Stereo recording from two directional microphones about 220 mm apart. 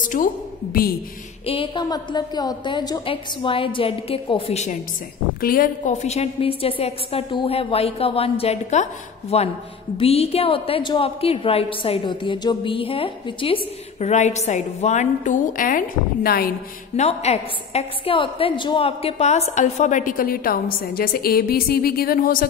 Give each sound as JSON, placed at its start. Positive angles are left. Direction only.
{"t": 0.0, "sound": "a woman's voice", "side_deg": 35}
{"t": 1.4, "sound": "a woman's voice", "side_deg": 25}
{"t": 5.4, "sound": "a woman's voice", "side_deg": 40}
{"t": 16.9, "sound": "a woman's voice", "side_deg": 30}